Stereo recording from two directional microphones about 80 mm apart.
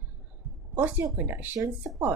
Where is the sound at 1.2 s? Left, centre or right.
Right.